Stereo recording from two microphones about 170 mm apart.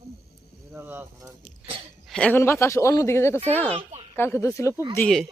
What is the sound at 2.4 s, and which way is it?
Speech, 15° left (ahead or behind).